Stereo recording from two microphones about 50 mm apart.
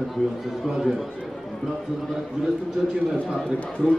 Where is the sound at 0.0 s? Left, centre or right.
Centre.